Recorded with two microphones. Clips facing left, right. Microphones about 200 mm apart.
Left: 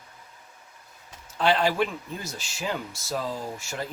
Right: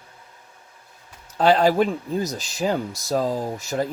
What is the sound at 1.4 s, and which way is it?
Speech, 40° right (ahead or behind).